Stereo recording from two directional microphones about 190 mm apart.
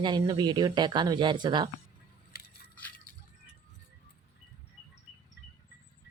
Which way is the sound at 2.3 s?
55° left (ahead or behind).